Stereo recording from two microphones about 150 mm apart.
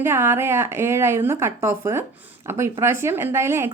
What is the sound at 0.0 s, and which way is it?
A woman's voice, 15° right (ahead or behind).